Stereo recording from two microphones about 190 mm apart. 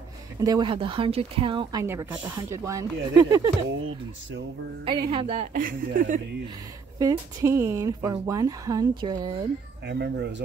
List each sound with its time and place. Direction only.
0.4 s speech: 20° right (ahead or behind)
4.8 s a woman's voice: 25° right (ahead or behind); by 6.2 s 45° right (ahead or behind)
7.0 s speech: 15° right (ahead or behind)
9.8 s speech: 60° right (ahead or behind)